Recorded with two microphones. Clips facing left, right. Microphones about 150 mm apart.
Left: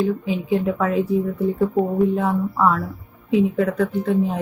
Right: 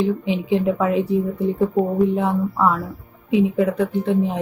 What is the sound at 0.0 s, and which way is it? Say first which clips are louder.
A woman's voice: right 1 dB; 20° right (ahead or behind).